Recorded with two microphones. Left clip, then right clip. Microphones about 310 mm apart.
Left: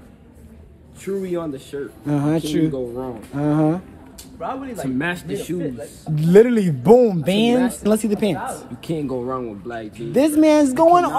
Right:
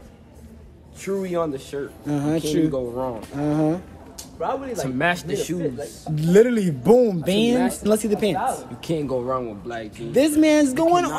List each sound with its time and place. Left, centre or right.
1.0 s speech: centre
2.0 s speech: centre
4.4 s a man's voice: right
4.9 s speech: centre
6.1 s speech: centre
8.8 s speech: centre
10.1 s speech: centre